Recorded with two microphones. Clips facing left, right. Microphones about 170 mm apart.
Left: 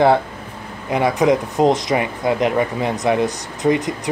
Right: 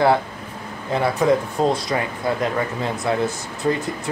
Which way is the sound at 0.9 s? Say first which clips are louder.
Left 2 dB; 15° left (ahead or behind).